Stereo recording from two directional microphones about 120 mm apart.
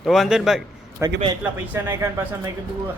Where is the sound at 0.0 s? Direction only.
Centre (ahead or behind).